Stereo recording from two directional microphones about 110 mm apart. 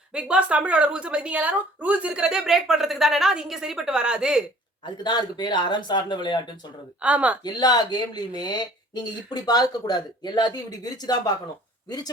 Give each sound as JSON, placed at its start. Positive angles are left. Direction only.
{"t": 0.1, "sound": "a woman's voice", "side_deg": -10}
{"t": 5.0, "sound": "speech", "side_deg": 45}
{"t": 7.0, "sound": "a woman's voice", "side_deg": -10}
{"t": 7.4, "sound": "speech", "side_deg": 40}